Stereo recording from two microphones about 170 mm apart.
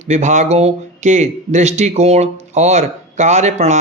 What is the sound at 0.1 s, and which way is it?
Speech, 45° right (ahead or behind).